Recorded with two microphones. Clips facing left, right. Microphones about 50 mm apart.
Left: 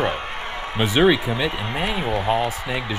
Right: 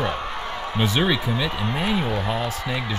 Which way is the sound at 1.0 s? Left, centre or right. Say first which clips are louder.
Left 4 dB; left.